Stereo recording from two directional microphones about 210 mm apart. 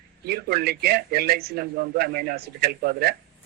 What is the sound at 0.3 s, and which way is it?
A man's voice, 50° right (ahead or behind).